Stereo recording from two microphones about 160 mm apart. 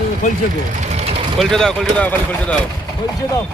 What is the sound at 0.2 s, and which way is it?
Speech, 50° left (ahead or behind).